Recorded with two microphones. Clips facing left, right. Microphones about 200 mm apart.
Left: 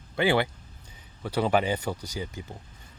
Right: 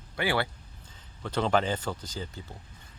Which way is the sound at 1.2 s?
10° left (ahead or behind).